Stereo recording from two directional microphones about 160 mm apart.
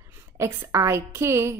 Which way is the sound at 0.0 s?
15° right (ahead or behind).